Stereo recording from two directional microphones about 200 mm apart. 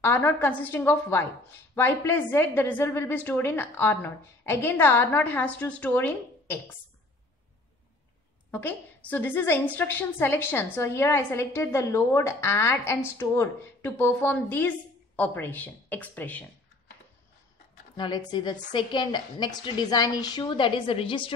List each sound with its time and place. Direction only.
0.0 s a woman's voice: 10° left (ahead or behind)
8.5 s a woman's voice: 10° left (ahead or behind)
17.9 s a woman's voice: 20° left (ahead or behind)